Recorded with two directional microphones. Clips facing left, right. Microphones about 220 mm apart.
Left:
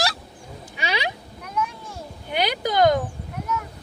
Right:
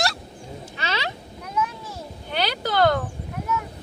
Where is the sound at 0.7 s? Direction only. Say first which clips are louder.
Left 2 dB; 15° left (ahead or behind).